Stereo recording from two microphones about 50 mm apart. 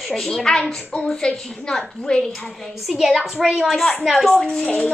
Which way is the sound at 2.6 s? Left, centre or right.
Centre.